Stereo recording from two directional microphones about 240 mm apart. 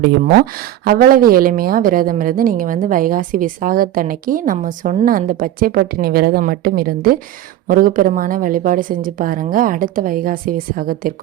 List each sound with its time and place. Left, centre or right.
0.9 s a woman's voice: right